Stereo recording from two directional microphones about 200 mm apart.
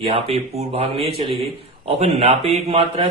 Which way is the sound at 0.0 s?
30° right (ahead or behind).